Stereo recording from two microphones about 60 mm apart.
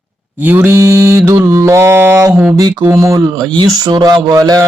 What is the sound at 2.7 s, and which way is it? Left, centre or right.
Mantra, right.